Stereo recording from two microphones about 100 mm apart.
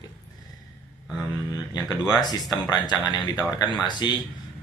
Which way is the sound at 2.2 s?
40° left (ahead or behind).